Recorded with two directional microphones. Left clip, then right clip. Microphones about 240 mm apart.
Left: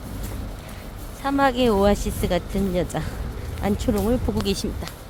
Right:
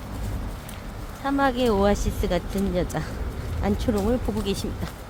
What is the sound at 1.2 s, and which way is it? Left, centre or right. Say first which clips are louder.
Speech: left 3 dB; left.